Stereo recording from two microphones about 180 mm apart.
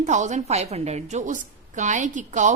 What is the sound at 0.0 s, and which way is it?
A woman's voice, 40° right (ahead or behind).